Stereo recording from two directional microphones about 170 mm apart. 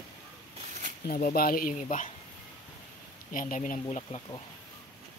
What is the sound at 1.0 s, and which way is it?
Speech, 60° left (ahead or behind).